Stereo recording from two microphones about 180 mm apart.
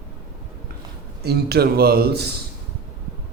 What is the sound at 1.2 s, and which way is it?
Speech, 65° right (ahead or behind).